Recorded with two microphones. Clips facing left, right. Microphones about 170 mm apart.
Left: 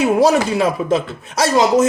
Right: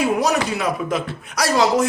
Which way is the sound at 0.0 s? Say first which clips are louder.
Left 5 dB; 30° left (ahead or behind).